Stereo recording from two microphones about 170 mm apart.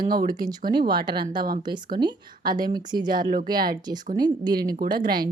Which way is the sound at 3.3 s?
60° right (ahead or behind).